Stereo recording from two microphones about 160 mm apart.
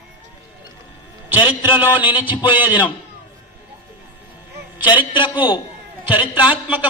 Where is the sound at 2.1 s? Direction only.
30° left (ahead or behind).